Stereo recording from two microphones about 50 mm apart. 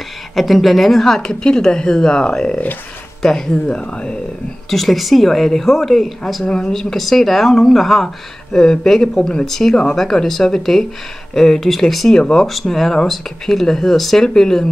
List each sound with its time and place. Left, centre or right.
0.4 s speech: centre
4.6 s speech: centre
12.2 s speech: centre
12.4 s speech: centre